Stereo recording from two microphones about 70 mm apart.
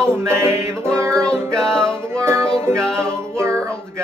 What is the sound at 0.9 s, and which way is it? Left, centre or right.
Music, centre.